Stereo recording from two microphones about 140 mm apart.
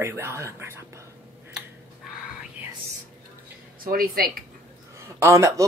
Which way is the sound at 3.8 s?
90° right.